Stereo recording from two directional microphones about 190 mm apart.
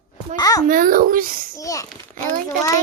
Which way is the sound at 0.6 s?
45° right (ahead or behind).